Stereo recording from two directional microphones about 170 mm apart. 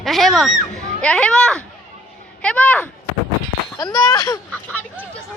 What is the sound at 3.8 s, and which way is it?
Speech, 25° left (ahead or behind).